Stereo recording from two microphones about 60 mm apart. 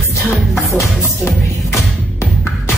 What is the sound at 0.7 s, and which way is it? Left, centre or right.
Music, left.